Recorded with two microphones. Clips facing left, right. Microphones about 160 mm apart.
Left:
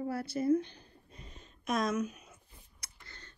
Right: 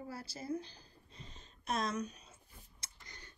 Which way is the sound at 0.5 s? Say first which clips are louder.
Left 8 dB; 35° right (ahead or behind).